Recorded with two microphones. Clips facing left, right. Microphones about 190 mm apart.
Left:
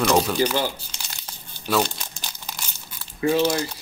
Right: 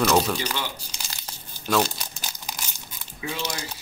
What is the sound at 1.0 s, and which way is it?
Crumpling, centre (ahead or behind).